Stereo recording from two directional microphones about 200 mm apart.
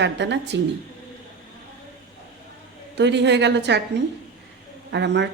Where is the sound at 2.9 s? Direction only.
60° right (ahead or behind).